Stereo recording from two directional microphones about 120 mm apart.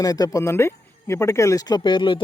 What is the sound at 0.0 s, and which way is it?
Speech, 30° left (ahead or behind).